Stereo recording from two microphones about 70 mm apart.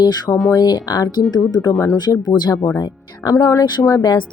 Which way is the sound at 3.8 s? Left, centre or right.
Left.